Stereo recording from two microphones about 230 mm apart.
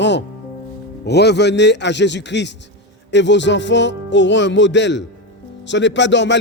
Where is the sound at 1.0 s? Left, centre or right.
Left.